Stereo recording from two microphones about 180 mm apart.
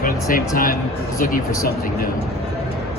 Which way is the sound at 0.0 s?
50° left (ahead or behind).